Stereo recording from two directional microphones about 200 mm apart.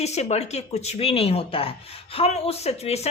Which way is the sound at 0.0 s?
35° left (ahead or behind).